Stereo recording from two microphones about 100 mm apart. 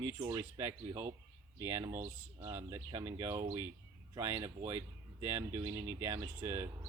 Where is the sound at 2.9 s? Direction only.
35° right (ahead or behind).